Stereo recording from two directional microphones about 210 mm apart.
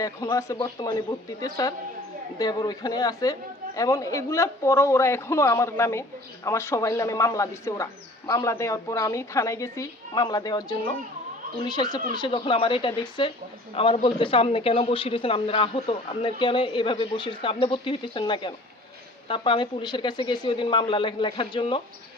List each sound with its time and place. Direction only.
0.0 s speech: 15° left (ahead or behind)